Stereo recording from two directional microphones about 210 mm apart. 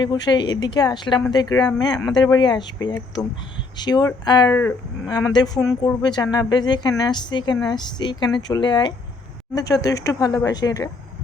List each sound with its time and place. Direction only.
0.0 s a woman's voice: 20° left (ahead or behind)